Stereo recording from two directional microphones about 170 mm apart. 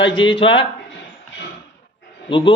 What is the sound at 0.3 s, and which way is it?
Speech, 30° left (ahead or behind).